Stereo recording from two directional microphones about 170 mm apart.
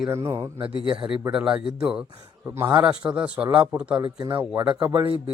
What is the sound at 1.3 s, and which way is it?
Speech, 5° right (ahead or behind).